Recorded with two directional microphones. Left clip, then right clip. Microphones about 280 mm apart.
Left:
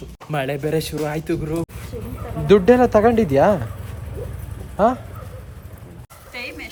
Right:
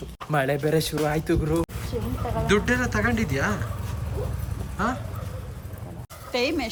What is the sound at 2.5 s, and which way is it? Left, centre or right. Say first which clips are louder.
Speech: left 12 dB; centre.